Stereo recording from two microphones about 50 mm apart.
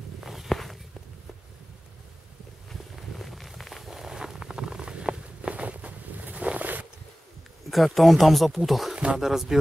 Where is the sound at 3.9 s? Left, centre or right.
Centre; by 6.8 s right.